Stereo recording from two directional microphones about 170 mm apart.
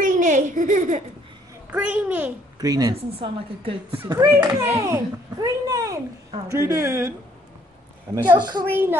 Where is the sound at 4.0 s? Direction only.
20° right (ahead or behind).